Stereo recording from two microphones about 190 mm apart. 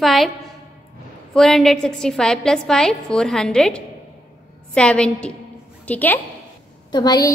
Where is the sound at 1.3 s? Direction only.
Centre (ahead or behind).